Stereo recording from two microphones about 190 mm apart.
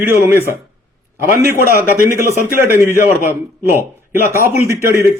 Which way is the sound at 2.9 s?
45° left (ahead or behind).